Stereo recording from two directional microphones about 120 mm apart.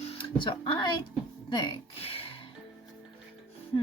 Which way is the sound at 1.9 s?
50° left (ahead or behind).